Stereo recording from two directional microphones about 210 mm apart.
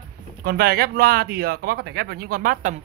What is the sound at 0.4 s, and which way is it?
Speech, 45° right (ahead or behind).